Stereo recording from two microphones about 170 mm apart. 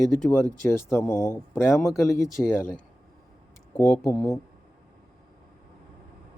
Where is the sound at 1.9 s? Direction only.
Centre (ahead or behind).